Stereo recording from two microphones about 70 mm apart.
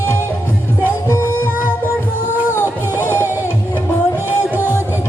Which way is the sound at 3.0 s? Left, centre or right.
Left.